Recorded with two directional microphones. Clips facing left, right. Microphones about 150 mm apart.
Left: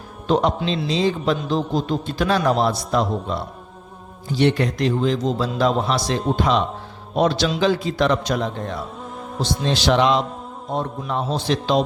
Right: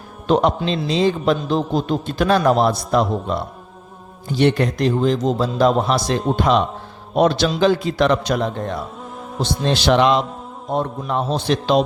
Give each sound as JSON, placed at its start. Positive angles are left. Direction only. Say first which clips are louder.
{"t": 0.3, "sound": "a man's voice", "louder": "right 2 dB", "side_deg": -60}
{"t": 9.0, "sound": "music", "louder": "even", "side_deg": 0}
{"t": 9.4, "sound": "a man's voice", "louder": "right 2 dB", "side_deg": -60}